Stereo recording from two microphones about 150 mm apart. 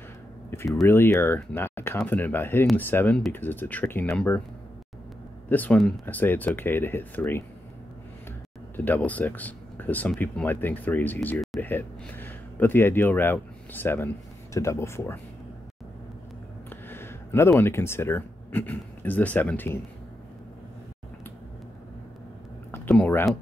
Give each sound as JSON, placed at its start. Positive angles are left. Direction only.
{"t": 0.5, "sound": "speech", "side_deg": 15}
{"t": 5.5, "sound": "speech", "side_deg": 10}
{"t": 8.7, "sound": "speech", "side_deg": 10}
{"t": 16.6, "sound": "speech", "side_deg": 15}
{"t": 22.7, "sound": "speech", "side_deg": 10}